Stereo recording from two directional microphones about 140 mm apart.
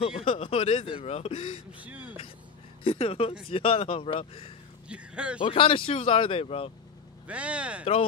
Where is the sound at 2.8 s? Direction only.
40° left (ahead or behind).